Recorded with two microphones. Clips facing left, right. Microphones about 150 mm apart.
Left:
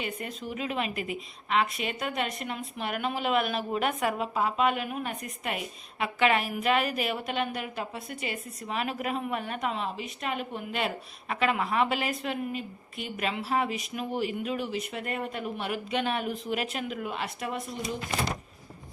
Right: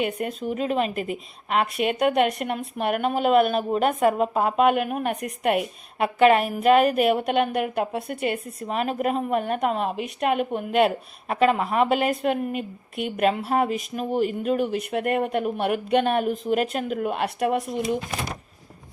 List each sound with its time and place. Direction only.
0.0 s a woman's voice: 55° right (ahead or behind)
6.1 s a woman's voice: 45° right (ahead or behind)
8.6 s a woman's voice: 40° right (ahead or behind)